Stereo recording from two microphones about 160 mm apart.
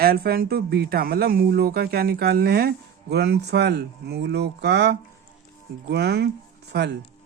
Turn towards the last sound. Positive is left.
turn(degrees=-90)